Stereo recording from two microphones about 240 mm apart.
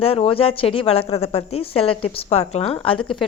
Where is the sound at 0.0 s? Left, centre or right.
Left.